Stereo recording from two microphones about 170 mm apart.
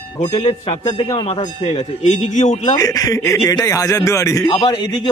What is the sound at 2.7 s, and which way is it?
Speech, 20° left (ahead or behind).